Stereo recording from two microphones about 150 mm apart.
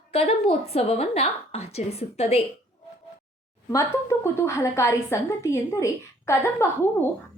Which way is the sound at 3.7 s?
20° left (ahead or behind).